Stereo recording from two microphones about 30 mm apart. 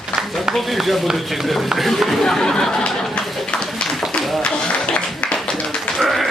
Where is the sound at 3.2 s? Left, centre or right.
Centre.